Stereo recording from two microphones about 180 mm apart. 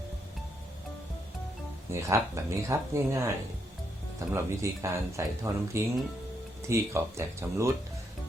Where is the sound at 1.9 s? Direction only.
15° right (ahead or behind).